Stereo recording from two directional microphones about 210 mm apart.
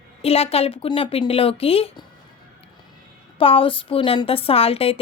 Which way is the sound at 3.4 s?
25° left (ahead or behind).